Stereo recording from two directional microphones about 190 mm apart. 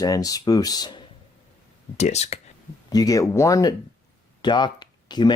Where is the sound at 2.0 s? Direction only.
35° left (ahead or behind).